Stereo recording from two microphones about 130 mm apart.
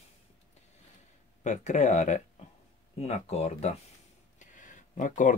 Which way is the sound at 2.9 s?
55° left (ahead or behind).